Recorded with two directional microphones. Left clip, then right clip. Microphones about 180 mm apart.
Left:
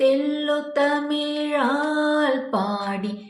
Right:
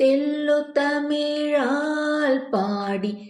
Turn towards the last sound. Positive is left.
turn(degrees=-40)  # may be behind; listen again after turning